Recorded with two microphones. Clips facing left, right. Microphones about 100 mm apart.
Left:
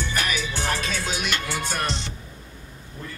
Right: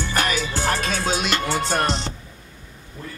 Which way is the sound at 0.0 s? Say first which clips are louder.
Right 4 dB; 40° right (ahead or behind).